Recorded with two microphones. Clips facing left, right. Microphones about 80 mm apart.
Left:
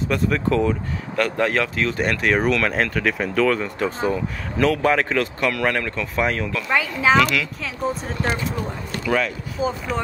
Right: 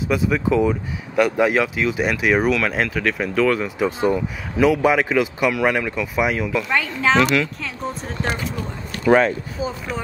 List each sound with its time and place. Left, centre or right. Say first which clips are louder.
0.1 s speech: right 2 dB; centre
6.7 s speech: left 2 dB; centre
9.0 s speech: right 7 dB; right
9.6 s speech: left 3 dB; centre